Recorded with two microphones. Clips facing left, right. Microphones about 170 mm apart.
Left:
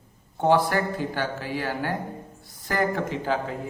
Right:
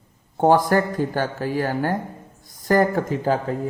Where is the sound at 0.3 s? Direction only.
45° right (ahead or behind).